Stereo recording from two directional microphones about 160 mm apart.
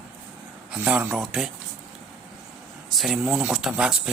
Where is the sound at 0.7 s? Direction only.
5° right (ahead or behind).